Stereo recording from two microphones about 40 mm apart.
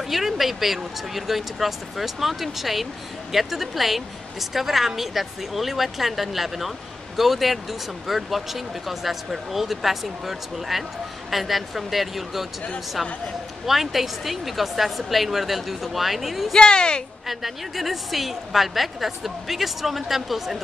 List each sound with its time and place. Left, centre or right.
0.1 s speech: centre
13.7 s speech: centre
16.5 s speech: left
17.3 s speech: centre